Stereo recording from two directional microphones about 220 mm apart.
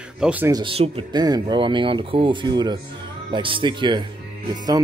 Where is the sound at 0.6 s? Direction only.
25° right (ahead or behind).